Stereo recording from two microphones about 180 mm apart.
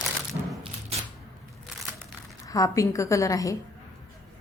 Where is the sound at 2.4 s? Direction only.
20° left (ahead or behind).